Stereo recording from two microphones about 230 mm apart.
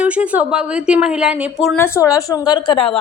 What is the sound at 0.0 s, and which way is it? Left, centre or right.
A woman's voice, centre.